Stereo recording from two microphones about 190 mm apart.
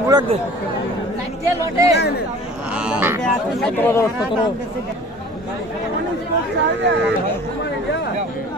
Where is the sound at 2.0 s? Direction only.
60° left (ahead or behind).